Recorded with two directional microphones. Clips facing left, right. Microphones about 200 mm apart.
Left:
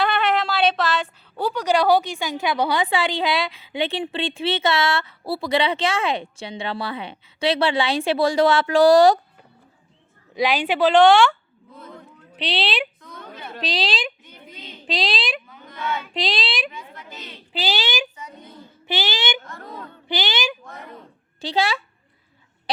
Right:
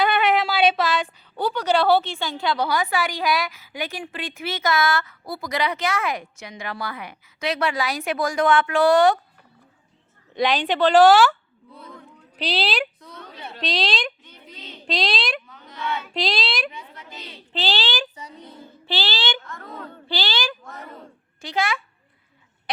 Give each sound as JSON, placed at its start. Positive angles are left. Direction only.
{"t": 0.0, "sound": "a sound", "side_deg": 0}
{"t": 1.4, "sound": "a woman's voice", "side_deg": 10}
{"t": 10.3, "sound": "a child's voice", "side_deg": 5}
{"t": 10.9, "sound": "a child's voice", "side_deg": -5}
{"t": 12.4, "sound": "a child's voice", "side_deg": 0}
{"t": 20.1, "sound": "a woman's voice", "side_deg": 20}
{"t": 21.4, "sound": "a child's voice", "side_deg": 35}